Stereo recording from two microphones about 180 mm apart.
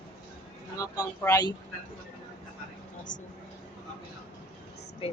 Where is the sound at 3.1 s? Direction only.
45° left (ahead or behind).